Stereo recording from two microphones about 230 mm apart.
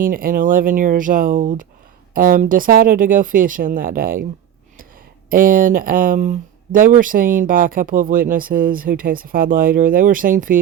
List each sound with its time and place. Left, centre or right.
0.0 s speech: right
5.3 s speech: right